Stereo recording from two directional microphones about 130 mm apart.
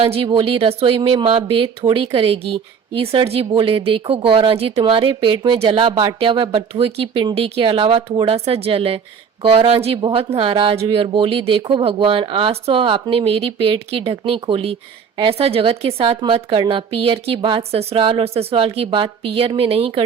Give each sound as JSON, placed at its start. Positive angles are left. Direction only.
{"t": 0.0, "sound": "speech", "side_deg": -45}